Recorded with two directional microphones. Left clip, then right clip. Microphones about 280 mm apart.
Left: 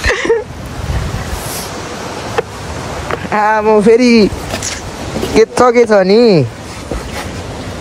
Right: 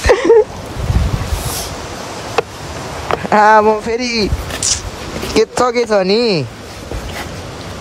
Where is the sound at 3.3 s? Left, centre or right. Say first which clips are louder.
Right 4 dB; right.